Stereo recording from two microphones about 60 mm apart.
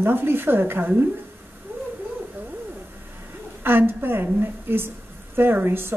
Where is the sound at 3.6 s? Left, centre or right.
Right.